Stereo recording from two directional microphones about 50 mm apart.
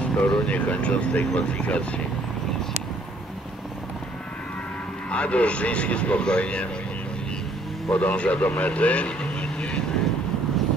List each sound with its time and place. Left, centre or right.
0.0 s speech: left
5.1 s speech: left
7.9 s speech: left